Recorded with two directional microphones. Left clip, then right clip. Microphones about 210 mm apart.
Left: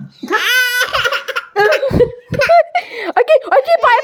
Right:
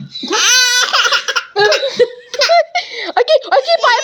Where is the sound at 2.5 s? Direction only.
30° left (ahead or behind).